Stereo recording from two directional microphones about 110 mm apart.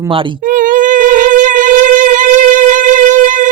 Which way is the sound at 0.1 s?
50° right (ahead or behind).